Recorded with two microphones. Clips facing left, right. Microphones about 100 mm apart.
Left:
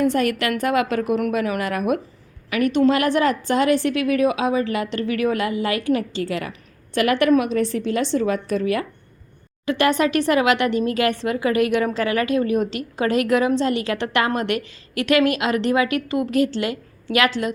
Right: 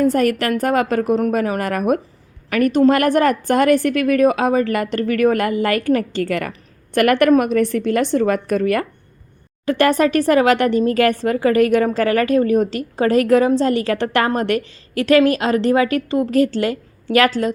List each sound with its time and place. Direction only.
0.0 s a woman's voice: 40° right (ahead or behind)
9.6 s speech: 40° right (ahead or behind)